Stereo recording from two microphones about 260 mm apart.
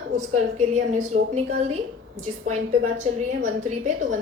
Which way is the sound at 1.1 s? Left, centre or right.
Right.